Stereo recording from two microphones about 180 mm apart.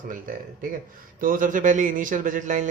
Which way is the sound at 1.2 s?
50° right (ahead or behind).